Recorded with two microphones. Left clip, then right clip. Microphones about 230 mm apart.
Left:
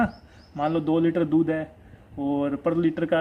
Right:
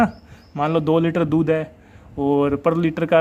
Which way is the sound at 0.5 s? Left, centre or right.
Right.